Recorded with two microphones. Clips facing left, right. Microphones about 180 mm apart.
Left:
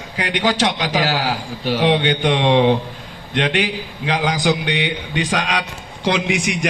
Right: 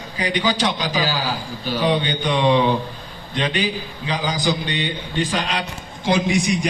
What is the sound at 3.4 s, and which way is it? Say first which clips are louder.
A man's voice: left 3 dB; 85° left.